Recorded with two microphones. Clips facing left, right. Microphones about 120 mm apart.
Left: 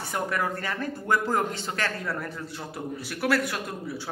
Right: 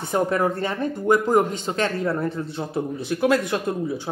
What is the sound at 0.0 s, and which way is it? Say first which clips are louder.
Speech: right 7 dB; 25° right (ahead or behind).